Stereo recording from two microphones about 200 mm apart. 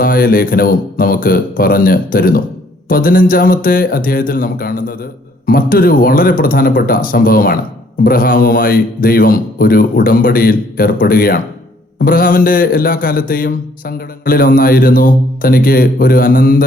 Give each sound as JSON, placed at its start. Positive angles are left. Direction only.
{"t": 0.0, "sound": "a man's voice", "side_deg": 45}